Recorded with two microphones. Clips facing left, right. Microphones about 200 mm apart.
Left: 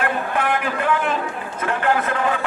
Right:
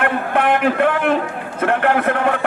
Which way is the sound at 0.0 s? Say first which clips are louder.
Right 4 dB; 60° right (ahead or behind).